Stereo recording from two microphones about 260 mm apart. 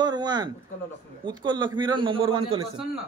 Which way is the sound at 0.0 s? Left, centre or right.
Centre.